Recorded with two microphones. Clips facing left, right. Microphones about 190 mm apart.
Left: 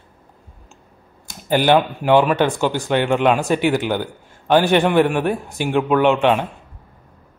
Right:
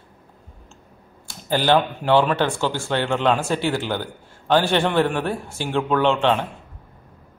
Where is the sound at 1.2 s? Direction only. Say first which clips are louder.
Left 4 dB; 15° left (ahead or behind).